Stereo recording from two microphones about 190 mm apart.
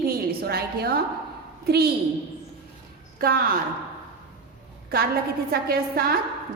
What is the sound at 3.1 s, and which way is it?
Speech, 50° right (ahead or behind).